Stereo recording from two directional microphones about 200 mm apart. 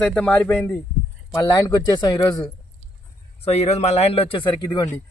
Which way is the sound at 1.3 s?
15° left (ahead or behind).